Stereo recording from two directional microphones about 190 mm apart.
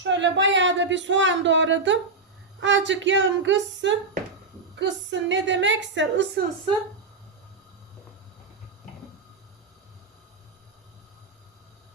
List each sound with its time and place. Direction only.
0.0 s speech: 75° right (ahead or behind)